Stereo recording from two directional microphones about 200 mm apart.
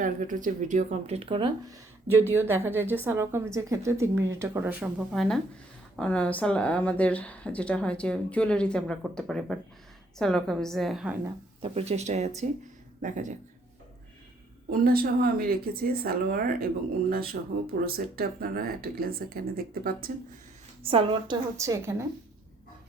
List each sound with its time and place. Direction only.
0.0 s speech: 40° right (ahead or behind); by 11.2 s 5° right (ahead or behind)
11.6 s speech: 30° right (ahead or behind)
14.7 s speech: 45° right (ahead or behind)
17.7 s speech: 50° right (ahead or behind)
20.8 s a woman's voice: 25° right (ahead or behind)